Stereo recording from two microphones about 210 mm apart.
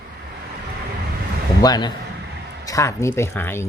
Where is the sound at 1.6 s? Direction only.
20° left (ahead or behind).